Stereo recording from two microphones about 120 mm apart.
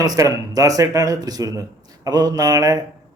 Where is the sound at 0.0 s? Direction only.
30° right (ahead or behind).